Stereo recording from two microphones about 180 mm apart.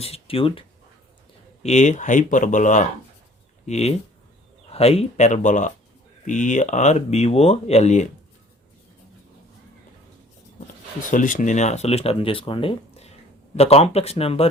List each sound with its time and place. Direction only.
0.0 s speech: 30° left (ahead or behind)
1.6 s speech: 40° left (ahead or behind)
11.0 s speech: 45° left (ahead or behind)